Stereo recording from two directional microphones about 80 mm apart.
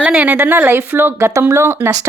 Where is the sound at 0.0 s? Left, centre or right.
Centre.